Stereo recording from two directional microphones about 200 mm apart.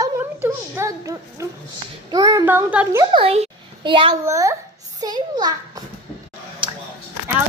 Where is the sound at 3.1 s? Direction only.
30° right (ahead or behind).